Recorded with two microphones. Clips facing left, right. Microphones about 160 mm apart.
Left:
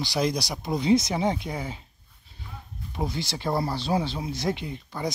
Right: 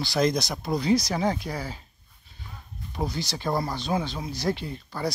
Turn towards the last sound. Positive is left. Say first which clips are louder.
# right 1 dB
turn(degrees=20)  # may be behind; listen again after turning